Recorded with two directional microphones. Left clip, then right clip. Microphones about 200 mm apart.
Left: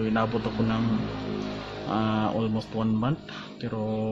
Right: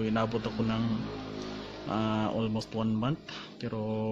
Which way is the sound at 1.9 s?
15° right (ahead or behind).